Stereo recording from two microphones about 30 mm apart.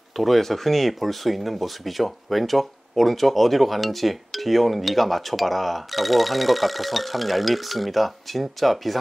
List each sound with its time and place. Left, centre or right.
0.2 s speech: centre